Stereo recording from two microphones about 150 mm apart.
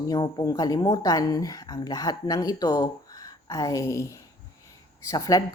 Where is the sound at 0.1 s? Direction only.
25° left (ahead or behind).